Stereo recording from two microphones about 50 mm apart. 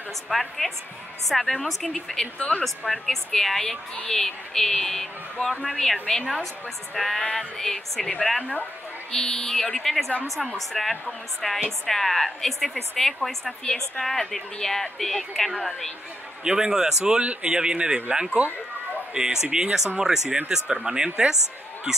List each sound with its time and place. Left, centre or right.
0.3 s a woman's voice: centre
2.3 s speech: left
2.6 s a woman's voice: centre
9.1 s a woman's voice: centre
16.4 s speech: centre